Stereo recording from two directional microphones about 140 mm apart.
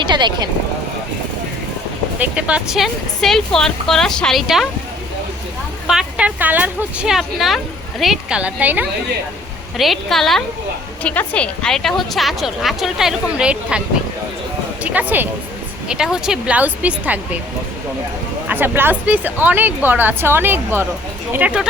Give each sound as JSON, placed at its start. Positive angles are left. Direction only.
{"t": 0.0, "sound": "speech", "side_deg": -35}
{"t": 2.1, "sound": "a woman's voice", "side_deg": -10}
{"t": 5.9, "sound": "speech", "side_deg": -5}
{"t": 9.7, "sound": "a woman's voice", "side_deg": 0}
{"t": 14.8, "sound": "speech", "side_deg": -10}
{"t": 18.4, "sound": "speech", "side_deg": -15}